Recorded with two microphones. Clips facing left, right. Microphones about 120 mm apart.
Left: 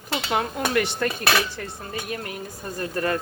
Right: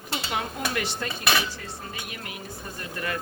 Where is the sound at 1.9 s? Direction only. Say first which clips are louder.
Left 7 dB; 40° left (ahead or behind).